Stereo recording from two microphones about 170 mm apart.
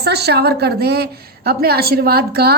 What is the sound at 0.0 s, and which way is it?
A woman's voice, 75° right (ahead or behind).